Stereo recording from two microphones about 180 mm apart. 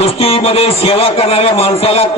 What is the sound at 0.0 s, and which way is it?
A man's voice, 35° left (ahead or behind).